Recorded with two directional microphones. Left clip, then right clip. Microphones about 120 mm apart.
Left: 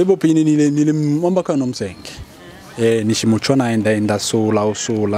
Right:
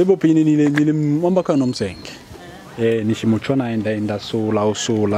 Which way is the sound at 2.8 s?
25° left (ahead or behind).